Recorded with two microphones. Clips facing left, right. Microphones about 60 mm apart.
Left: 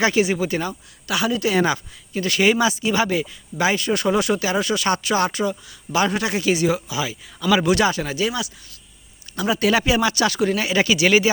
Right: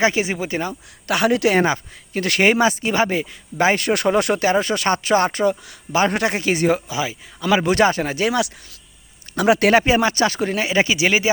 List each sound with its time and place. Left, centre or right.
0.0 s speech: right
1.0 s speech: right
2.5 s speech: right
3.8 s speech: right
4.5 s speech: right
8.2 s speech: right
9.7 s speech: right